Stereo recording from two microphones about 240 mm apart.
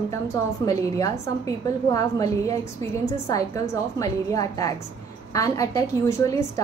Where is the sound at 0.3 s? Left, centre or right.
Centre.